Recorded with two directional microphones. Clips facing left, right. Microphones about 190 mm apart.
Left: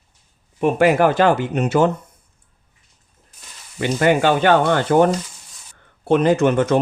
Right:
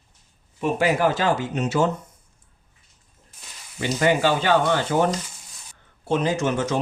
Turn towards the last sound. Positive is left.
turn(degrees=55)  # may be behind; listen again after turning